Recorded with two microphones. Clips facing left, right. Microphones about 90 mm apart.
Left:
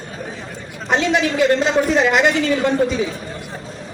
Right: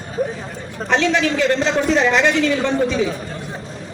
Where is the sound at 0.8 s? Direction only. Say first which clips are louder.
Even; 15° left (ahead or behind).